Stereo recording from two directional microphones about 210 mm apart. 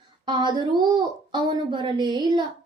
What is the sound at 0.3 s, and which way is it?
Speech, 20° right (ahead or behind).